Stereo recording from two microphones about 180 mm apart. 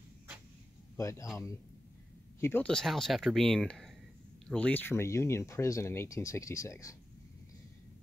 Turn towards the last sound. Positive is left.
turn(degrees=15)  # may be behind; listen again after turning